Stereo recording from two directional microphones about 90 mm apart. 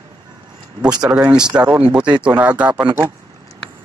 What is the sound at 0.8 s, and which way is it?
Speech, 10° right (ahead or behind).